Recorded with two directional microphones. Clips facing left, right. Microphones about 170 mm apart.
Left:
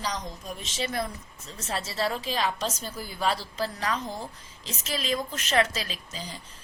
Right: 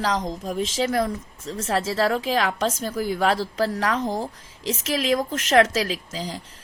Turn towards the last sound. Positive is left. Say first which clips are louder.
# right 9 dB
turn(degrees=-90)